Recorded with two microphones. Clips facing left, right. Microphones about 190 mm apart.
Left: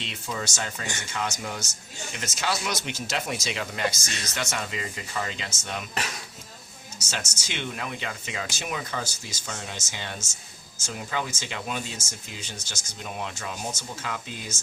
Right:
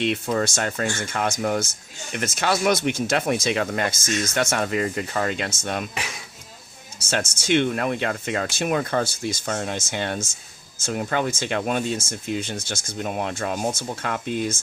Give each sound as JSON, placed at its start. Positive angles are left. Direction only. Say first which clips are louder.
{"t": 0.0, "sound": "speech", "louder": "right 11 dB", "side_deg": -55}
{"t": 7.1, "sound": "speech", "louder": "right 14 dB", "side_deg": -55}